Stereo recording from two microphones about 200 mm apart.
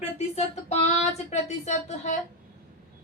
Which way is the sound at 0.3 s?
30° left (ahead or behind).